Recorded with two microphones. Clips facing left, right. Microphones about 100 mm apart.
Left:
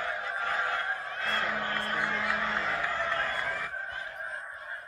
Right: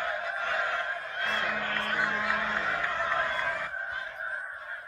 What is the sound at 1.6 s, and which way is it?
Music, 30° left (ahead or behind).